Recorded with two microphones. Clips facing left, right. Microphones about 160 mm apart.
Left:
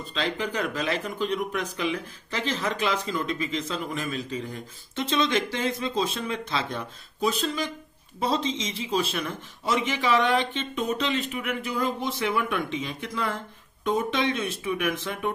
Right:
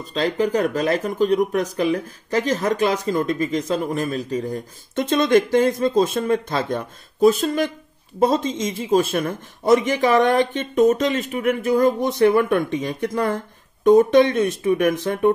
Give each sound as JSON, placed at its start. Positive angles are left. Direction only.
{"t": 0.0, "sound": "speech", "side_deg": -40}